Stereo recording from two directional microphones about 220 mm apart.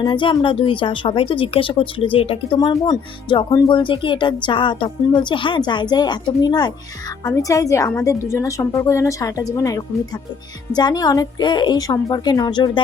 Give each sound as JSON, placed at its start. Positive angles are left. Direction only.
{"t": 0.0, "sound": "a woman's voice", "side_deg": 20}